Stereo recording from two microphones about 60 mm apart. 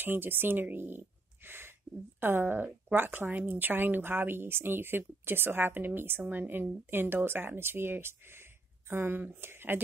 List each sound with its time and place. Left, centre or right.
0.0 s a woman's voice: right